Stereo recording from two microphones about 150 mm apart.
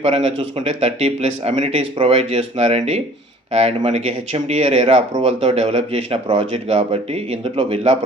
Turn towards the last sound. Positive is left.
turn(degrees=-40)  # may be behind; listen again after turning